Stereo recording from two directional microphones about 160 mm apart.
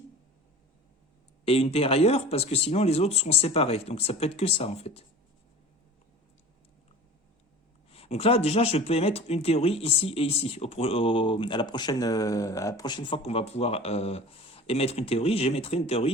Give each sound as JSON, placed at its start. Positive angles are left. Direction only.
{"t": 1.5, "sound": "speech", "side_deg": 40}
{"t": 7.9, "sound": "speech", "side_deg": 40}